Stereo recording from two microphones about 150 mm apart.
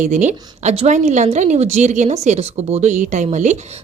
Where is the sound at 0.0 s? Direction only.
55° right (ahead or behind).